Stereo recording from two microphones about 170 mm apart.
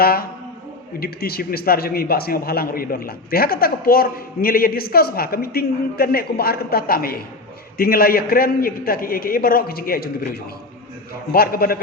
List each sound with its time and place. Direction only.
0.0 s speech: 65° left (ahead or behind)
11.3 s speech: 60° left (ahead or behind)